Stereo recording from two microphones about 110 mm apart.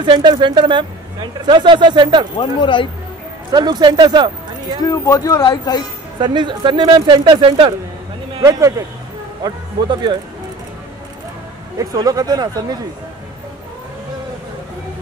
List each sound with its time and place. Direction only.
0.0 s speech: 40° right (ahead or behind)
2.3 s speech: 50° left (ahead or behind)
3.5 s speech: 40° right (ahead or behind)
4.8 s speech: 30° left (ahead or behind)
6.1 s speech: 45° right (ahead or behind)
8.4 s speech: 30° right (ahead or behind)
9.4 s speech: 40° right (ahead or behind)
11.8 s speech: 35° right (ahead or behind)